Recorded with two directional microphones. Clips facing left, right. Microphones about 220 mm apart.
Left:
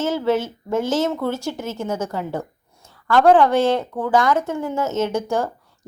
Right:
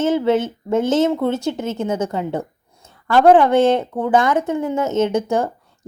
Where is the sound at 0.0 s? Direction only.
20° right (ahead or behind).